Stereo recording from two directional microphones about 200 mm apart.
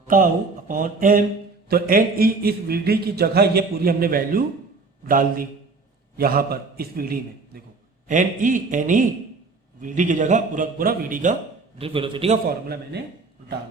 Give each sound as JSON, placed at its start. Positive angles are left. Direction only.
{"t": 0.7, "sound": "a man's voice", "side_deg": -45}
{"t": 11.8, "sound": "a man's voice", "side_deg": -25}
{"t": 12.6, "sound": "a man's voice", "side_deg": -50}